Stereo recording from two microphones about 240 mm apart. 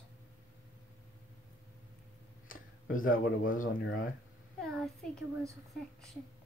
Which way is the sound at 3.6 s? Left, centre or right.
Left.